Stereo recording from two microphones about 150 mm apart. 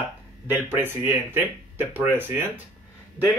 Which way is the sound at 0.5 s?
15° right (ahead or behind).